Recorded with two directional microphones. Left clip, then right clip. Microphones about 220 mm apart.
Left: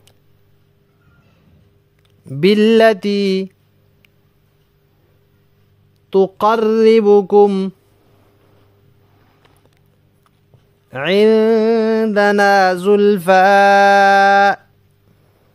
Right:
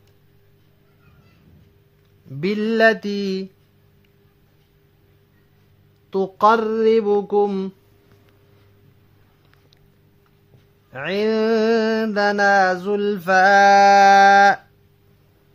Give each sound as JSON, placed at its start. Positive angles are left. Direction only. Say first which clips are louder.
{"t": 2.2, "sound": "mantra", "louder": "left 11 dB", "side_deg": 40}
{"t": 6.0, "sound": "mantra", "louder": "left 3 dB", "side_deg": 30}
{"t": 10.9, "sound": "mantra", "louder": "left 9 dB", "side_deg": 40}